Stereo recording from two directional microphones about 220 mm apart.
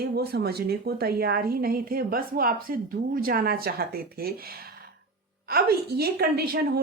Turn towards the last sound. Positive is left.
turn(degrees=-45)  # may be behind; listen again after turning